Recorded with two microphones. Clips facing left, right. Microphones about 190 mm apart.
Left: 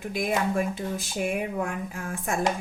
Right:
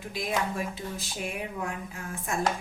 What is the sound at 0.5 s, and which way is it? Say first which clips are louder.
Speech: left 6 dB; 55° left (ahead or behind).